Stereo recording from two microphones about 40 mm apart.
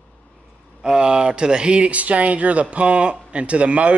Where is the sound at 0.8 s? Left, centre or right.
Right.